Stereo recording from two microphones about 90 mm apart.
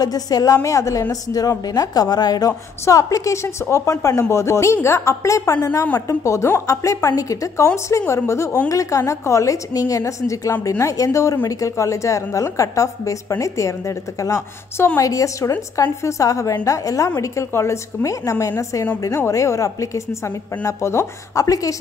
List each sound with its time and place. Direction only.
0.0 s a woman's voice: 45° left (ahead or behind)
2.8 s a woman's voice: 35° left (ahead or behind)